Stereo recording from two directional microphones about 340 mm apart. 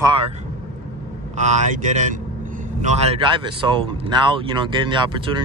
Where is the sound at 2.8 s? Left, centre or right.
Centre.